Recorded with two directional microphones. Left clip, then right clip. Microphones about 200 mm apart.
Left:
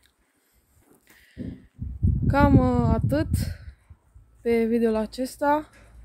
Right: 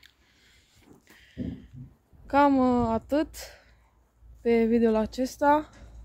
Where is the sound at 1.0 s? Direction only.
5° left (ahead or behind).